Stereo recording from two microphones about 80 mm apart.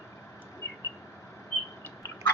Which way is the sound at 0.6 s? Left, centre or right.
Left.